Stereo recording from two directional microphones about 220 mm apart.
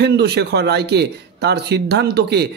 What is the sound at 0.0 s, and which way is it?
Speech, 50° right (ahead or behind).